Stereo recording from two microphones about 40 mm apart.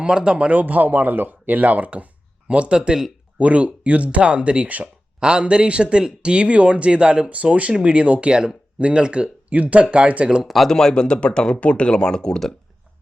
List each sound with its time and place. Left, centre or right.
0.0 s speech: right
0.5 s speech: right
2.5 s speech: right
3.3 s speech: right
5.2 s speech: right
7.3 s speech: right
10.4 s speech: centre
10.7 s speech: centre